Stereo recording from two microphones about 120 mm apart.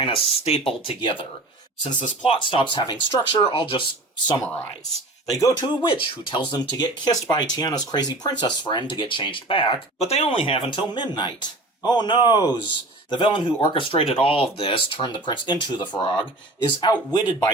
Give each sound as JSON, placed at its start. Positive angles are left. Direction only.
{"t": 0.0, "sound": "speech", "side_deg": 55}
{"t": 2.2, "sound": "speech", "side_deg": 45}
{"t": 4.4, "sound": "speech", "side_deg": 10}
{"t": 5.3, "sound": "speech", "side_deg": 30}